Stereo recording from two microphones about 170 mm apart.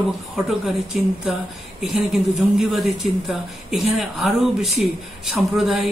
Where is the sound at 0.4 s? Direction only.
Centre (ahead or behind).